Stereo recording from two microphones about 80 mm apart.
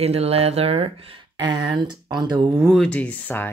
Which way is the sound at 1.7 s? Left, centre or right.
Right.